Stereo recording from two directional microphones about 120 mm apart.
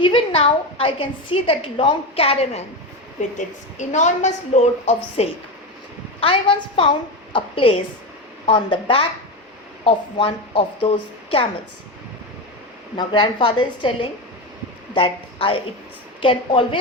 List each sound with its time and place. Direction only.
0.0 s a woman's voice: 50° left (ahead or behind)
3.2 s a woman's voice: 90° left; by 5.3 s 60° left (ahead or behind)
6.1 s a woman's voice: 50° left (ahead or behind)
13.0 s a woman's voice: 40° left (ahead or behind)